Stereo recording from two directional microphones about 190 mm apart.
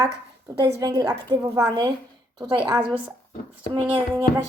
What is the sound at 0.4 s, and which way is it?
A woman's voice, 20° right (ahead or behind).